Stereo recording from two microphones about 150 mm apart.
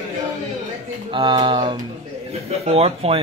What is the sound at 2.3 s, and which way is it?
Speech, 45° right (ahead or behind).